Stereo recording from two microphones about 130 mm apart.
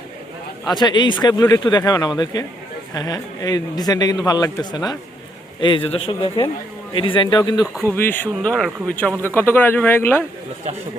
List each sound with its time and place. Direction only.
0.7 s speech: 35° left (ahead or behind)
7.9 s speech: 15° left (ahead or behind)